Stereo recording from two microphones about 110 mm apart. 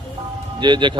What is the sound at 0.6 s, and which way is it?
Speech, 45° right (ahead or behind).